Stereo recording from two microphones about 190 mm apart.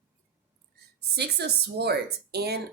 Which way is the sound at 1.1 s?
60° right (ahead or behind).